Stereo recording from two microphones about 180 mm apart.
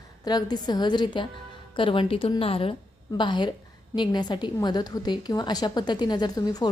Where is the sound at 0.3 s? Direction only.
20° left (ahead or behind).